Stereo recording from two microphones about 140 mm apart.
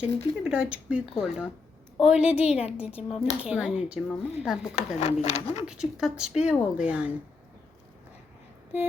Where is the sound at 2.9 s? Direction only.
45° left (ahead or behind).